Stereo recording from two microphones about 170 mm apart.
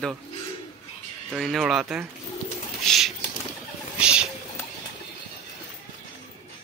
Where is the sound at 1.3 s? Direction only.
Centre (ahead or behind).